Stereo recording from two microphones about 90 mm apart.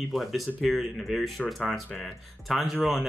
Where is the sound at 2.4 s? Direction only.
Centre (ahead or behind).